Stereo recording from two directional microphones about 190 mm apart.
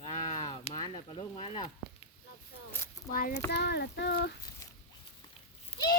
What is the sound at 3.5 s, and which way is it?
Speech, 60° left (ahead or behind).